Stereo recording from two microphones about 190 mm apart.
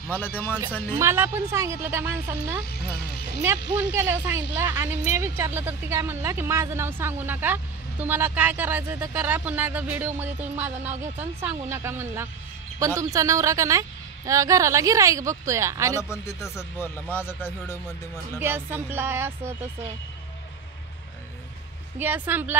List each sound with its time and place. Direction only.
0.1 s speech: 10° left (ahead or behind)
0.9 s speech: 10° right (ahead or behind)
2.6 s speech: 60° left (ahead or behind)
3.4 s speech: 10° right (ahead or behind)
16.0 s speech: 15° left (ahead or behind)
18.4 s speech: 10° right (ahead or behind)
21.9 s speech: 10° right (ahead or behind)